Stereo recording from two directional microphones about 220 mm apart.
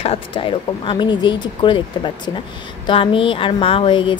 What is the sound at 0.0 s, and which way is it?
Speech, 25° left (ahead or behind).